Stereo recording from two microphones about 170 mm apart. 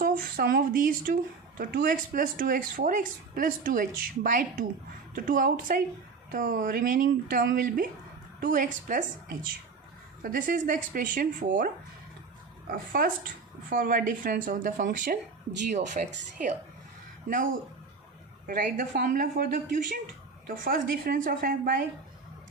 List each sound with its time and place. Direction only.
0.0 s speech: 60° right (ahead or behind)
10.2 s speech: 55° right (ahead or behind)
12.7 s speech: 60° right (ahead or behind)
20.7 s speech: 55° right (ahead or behind)